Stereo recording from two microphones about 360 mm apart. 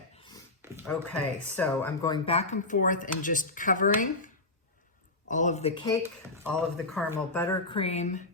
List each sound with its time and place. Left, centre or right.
0.9 s speech: centre; by 4.1 s left
5.3 s speech: centre
6.4 s speech: centre